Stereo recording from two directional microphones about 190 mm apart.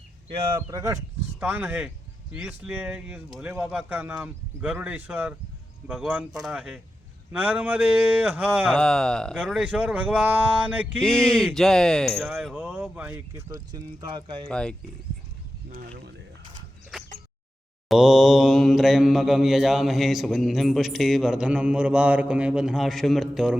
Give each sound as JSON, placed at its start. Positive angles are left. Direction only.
{"t": 0.3, "sound": "speech", "side_deg": -30}
{"t": 0.7, "sound": "speech", "side_deg": -15}
{"t": 5.9, "sound": "mantra", "side_deg": -5}
{"t": 7.3, "sound": "speech", "side_deg": -10}
{"t": 8.7, "sound": "mantra", "side_deg": 5}
{"t": 11.0, "sound": "mantra", "side_deg": 5}
{"t": 14.4, "sound": "mantra", "side_deg": 5}
{"t": 17.8, "sound": "mantra", "side_deg": -5}